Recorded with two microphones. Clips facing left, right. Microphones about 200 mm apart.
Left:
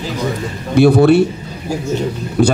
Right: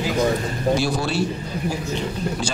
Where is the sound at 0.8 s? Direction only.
60° left (ahead or behind).